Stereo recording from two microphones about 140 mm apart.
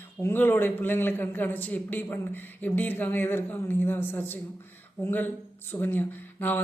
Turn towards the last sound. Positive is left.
turn(degrees=15)  # may be behind; listen again after turning